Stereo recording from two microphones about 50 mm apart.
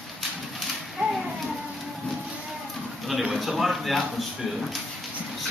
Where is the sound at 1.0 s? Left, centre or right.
Centre.